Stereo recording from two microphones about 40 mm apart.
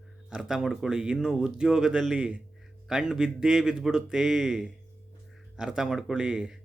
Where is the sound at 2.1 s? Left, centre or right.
Right.